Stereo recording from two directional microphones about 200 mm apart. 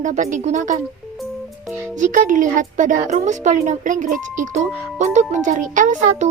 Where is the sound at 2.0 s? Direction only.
40° right (ahead or behind).